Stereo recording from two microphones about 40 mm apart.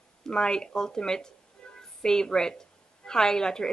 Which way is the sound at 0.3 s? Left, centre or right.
Centre.